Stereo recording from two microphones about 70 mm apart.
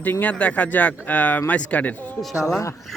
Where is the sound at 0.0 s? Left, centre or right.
Left.